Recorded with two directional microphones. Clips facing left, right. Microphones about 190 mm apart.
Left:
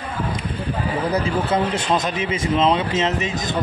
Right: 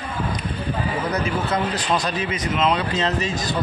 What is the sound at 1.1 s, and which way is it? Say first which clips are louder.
Speech: left 4 dB; 25° left (ahead or behind).